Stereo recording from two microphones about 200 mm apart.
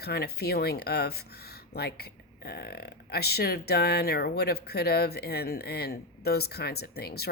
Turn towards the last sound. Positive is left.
turn(degrees=50)  # may be behind; listen again after turning